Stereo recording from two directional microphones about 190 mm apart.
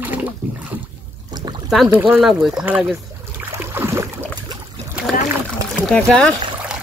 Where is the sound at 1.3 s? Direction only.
25° right (ahead or behind).